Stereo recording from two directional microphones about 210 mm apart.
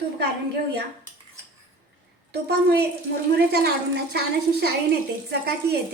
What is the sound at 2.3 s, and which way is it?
A woman's voice, 50° right (ahead or behind).